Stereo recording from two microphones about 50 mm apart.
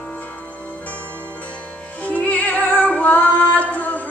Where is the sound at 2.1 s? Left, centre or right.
Left.